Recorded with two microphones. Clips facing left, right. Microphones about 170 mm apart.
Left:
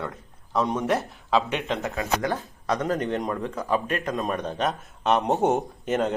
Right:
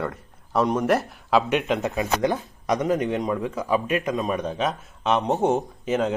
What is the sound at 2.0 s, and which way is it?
Speech, 20° right (ahead or behind).